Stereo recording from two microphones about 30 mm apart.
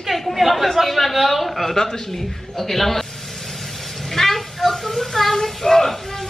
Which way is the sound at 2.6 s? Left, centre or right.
Centre.